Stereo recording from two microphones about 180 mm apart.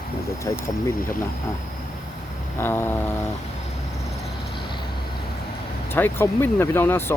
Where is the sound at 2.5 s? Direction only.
10° left (ahead or behind).